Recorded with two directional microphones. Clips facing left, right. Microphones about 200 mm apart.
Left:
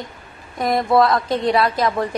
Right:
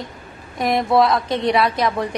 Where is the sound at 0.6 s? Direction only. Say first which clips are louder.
Even; centre (ahead or behind).